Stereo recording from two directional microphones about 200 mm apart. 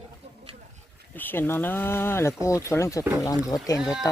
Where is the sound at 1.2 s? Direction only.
10° left (ahead or behind).